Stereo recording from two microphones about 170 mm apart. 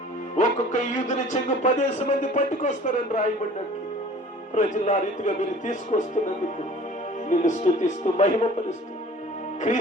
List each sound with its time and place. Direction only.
0.3 s a man's voice: 45° left (ahead or behind)
4.5 s a man's voice: 45° left (ahead or behind)
7.3 s a man's voice: 45° left (ahead or behind)